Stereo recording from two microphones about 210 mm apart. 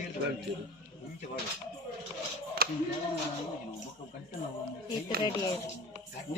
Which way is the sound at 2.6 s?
45° right (ahead or behind).